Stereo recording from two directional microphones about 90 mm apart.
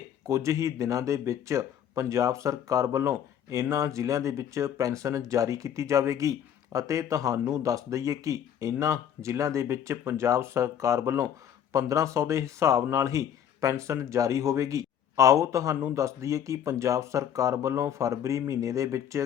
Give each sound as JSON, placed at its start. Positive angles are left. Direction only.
{"t": 0.3, "sound": "speech", "side_deg": -35}